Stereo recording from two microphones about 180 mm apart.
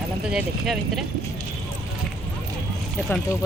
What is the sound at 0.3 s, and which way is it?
Speech, 5° right (ahead or behind).